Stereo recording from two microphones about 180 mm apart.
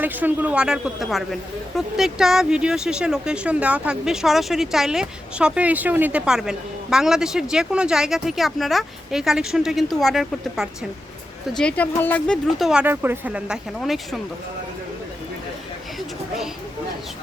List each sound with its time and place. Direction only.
0.0 s speech: 10° right (ahead or behind)